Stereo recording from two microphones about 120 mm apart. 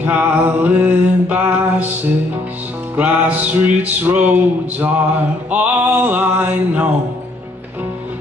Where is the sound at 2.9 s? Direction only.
15° right (ahead or behind).